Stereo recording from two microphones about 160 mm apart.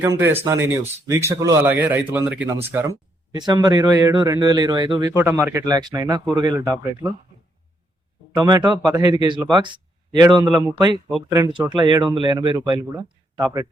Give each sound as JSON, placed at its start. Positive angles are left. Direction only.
{"t": 0.2, "sound": "speech", "side_deg": -15}
{"t": 5.1, "sound": "speech", "side_deg": -15}
{"t": 8.4, "sound": "speech", "side_deg": -25}